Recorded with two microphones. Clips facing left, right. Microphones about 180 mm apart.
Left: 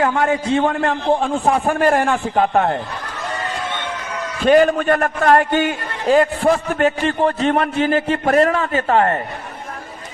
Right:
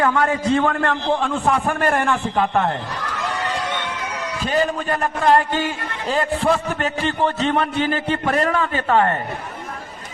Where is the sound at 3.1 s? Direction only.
75° right (ahead or behind).